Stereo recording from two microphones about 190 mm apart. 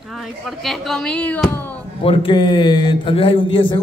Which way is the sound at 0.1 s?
Centre (ahead or behind).